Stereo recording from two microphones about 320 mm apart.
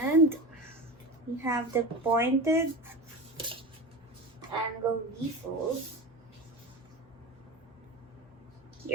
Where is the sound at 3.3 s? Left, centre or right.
Centre.